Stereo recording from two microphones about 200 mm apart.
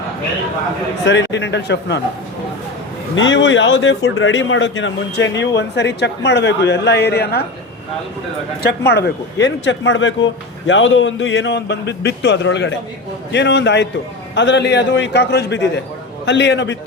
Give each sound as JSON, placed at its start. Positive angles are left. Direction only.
{"t": 1.0, "sound": "speech", "side_deg": 60}
{"t": 3.2, "sound": "speech", "side_deg": 70}
{"t": 8.9, "sound": "speech", "side_deg": 55}